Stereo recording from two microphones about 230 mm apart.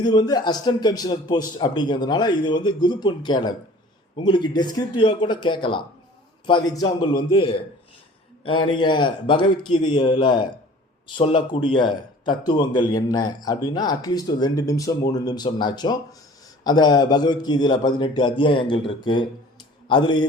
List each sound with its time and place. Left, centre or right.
0.0 s a man's voice: centre